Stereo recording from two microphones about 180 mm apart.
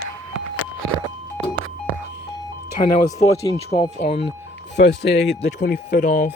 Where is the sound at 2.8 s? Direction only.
30° left (ahead or behind).